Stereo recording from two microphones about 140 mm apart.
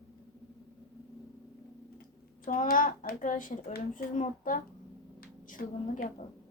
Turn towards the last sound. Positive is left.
turn(degrees=80)